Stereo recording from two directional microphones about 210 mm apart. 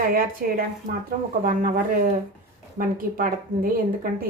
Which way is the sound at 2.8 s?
40° right (ahead or behind).